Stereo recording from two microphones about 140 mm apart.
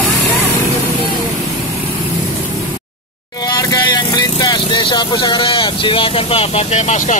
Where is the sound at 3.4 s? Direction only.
30° left (ahead or behind).